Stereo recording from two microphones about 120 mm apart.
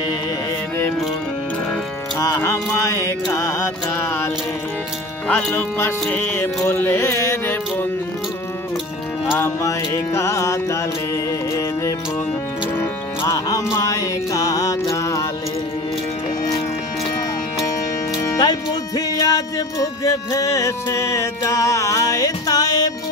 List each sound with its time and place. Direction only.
2.1 s music: 25° left (ahead or behind)
5.3 s speech: 15° left (ahead or behind)
6.7 s carnatic music: 15° left (ahead or behind)
9.3 s music: 25° left (ahead or behind)
13.2 s music: 30° left (ahead or behind)
18.3 s music: 35° left (ahead or behind)